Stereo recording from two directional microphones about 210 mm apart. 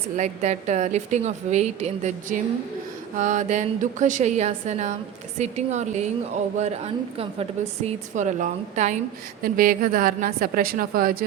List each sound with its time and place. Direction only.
0.2 s a woman's voice: 35° right (ahead or behind)